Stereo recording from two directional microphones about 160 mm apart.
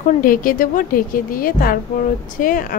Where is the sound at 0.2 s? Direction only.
60° left (ahead or behind).